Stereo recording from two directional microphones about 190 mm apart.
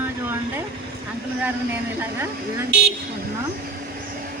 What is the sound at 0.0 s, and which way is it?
Vehicle, 10° right (ahead or behind).